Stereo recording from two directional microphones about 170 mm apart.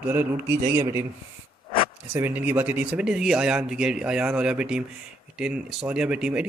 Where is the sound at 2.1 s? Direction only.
10° right (ahead or behind).